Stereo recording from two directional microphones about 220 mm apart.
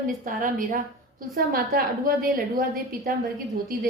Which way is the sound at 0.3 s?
40° right (ahead or behind).